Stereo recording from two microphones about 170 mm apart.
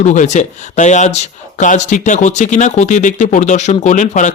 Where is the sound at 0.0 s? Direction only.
45° left (ahead or behind).